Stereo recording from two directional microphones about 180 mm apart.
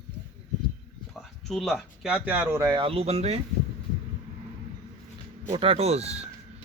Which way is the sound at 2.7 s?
30° right (ahead or behind).